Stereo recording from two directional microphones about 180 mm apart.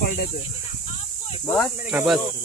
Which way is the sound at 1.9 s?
5° right (ahead or behind).